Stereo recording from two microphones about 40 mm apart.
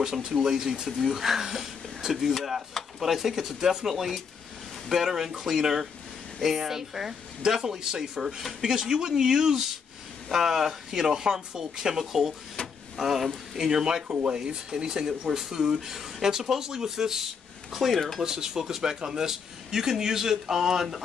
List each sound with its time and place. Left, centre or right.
0.0 s speech: centre
8.6 s speech: centre
14.0 s speech: right
14.3 s speech: centre
17.6 s speech: centre
18.2 s speech: centre